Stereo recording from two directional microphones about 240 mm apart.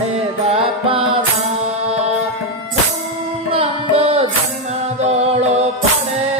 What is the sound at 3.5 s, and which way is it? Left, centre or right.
Music, right.